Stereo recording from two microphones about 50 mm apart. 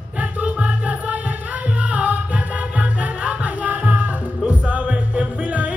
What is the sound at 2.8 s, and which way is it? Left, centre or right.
Music, right.